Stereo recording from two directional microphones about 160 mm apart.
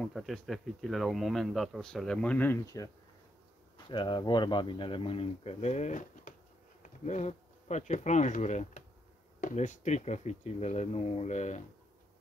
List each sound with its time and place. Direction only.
0.0 s speech: centre (ahead or behind); by 2.9 s 20° left (ahead or behind)
3.7 s speech: 30° left (ahead or behind); by 11.6 s 45° left (ahead or behind)